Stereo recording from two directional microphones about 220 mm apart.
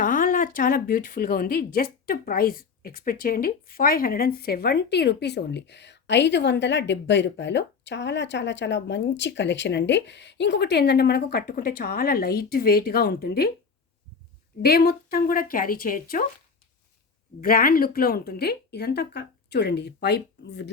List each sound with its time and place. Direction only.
0.0 s speech: 35° left (ahead or behind)
14.6 s speech: 45° left (ahead or behind)
17.4 s speech: 40° left (ahead or behind)